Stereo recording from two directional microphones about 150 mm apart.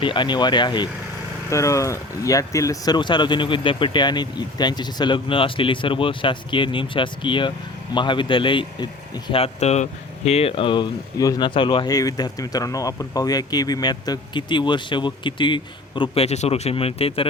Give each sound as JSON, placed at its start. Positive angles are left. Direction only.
{"t": 0.0, "sound": "speech", "side_deg": 30}
{"t": 1.5, "sound": "speech", "side_deg": 20}